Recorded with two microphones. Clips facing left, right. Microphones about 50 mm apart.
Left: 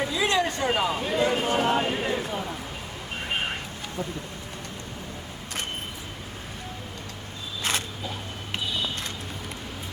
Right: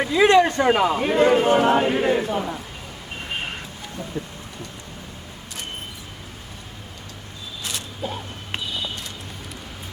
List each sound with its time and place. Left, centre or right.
0.0 s a man's voice: right
2.2 s speech: right
7.6 s a sound: left